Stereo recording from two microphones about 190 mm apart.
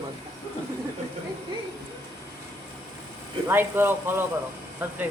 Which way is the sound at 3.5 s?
10° right (ahead or behind).